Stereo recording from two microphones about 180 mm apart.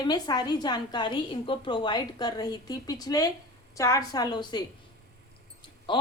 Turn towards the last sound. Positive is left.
turn(degrees=25)  # may be behind; listen again after turning